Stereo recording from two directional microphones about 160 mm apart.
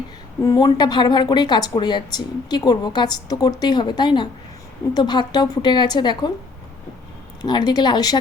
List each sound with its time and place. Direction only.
0.4 s speech: 25° left (ahead or behind)
7.4 s speech: 25° left (ahead or behind)